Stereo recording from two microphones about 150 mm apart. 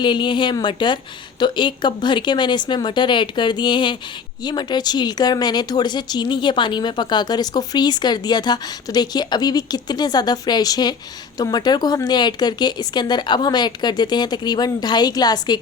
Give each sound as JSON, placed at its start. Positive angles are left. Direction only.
{"t": 0.0, "sound": "speech", "side_deg": 30}